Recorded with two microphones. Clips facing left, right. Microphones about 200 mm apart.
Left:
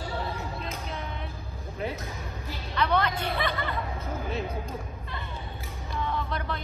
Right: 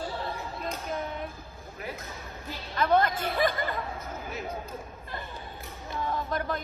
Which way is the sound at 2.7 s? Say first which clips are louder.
Right 2 dB; 45° right (ahead or behind).